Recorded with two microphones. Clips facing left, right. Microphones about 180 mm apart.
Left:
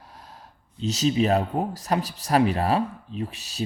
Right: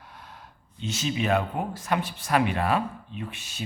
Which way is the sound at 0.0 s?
35° left (ahead or behind).